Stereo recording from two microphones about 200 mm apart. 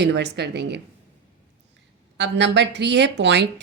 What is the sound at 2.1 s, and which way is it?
A woman's voice, 60° right (ahead or behind).